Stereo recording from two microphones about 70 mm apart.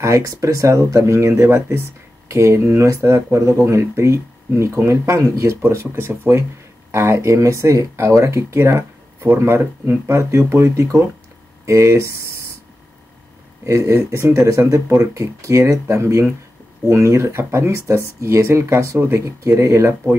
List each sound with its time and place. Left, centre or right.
0.0 s speech: right
13.7 s speech: right